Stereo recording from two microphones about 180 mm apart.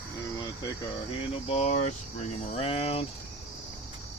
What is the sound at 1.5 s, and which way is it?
Speech, 40° left (ahead or behind).